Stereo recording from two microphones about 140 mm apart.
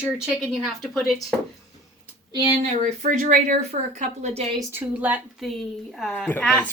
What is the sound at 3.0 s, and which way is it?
Speech, 60° right (ahead or behind).